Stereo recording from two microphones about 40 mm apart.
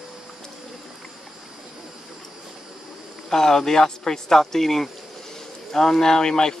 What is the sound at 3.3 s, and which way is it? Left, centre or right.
Speech, centre.